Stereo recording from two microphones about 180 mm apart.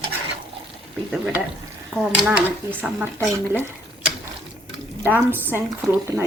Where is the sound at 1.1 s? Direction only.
5° right (ahead or behind).